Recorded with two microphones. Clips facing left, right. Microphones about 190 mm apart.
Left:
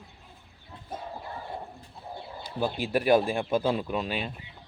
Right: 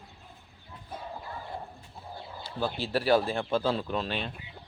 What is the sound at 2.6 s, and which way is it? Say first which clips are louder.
Speech: left 2 dB; 15° left (ahead or behind).